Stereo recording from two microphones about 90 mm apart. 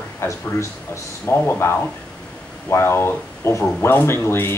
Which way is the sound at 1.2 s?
20° left (ahead or behind).